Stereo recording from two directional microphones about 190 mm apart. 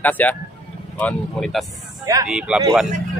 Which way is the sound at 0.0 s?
10° left (ahead or behind).